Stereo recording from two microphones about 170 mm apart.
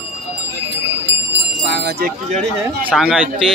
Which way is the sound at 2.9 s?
5° right (ahead or behind).